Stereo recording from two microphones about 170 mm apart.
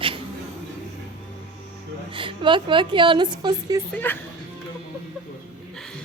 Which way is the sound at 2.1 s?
30° right (ahead or behind).